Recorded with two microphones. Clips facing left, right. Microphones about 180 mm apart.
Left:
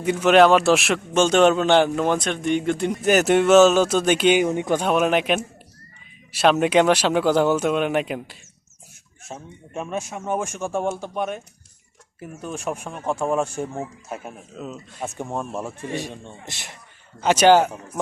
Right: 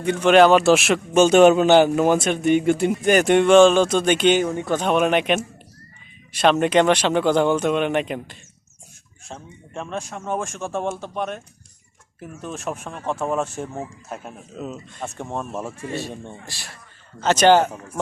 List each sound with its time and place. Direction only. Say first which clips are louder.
0.0 s a man's voice: right 1 dB; 5° left (ahead or behind)
15.9 s a man's voice: even; 15° left (ahead or behind)
17.2 s a man's voice: even; 10° left (ahead or behind)